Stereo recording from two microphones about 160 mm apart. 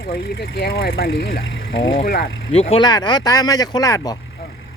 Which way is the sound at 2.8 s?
25° left (ahead or behind).